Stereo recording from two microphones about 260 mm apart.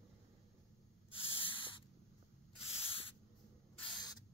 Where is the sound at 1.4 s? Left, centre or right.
Centre.